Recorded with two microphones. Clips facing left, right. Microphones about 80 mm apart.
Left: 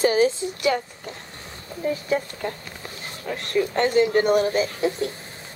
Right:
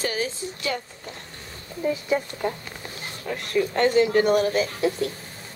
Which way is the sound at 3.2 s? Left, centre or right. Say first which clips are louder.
Left 1 dB; centre.